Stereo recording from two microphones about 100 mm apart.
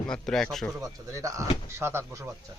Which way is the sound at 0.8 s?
35° right (ahead or behind).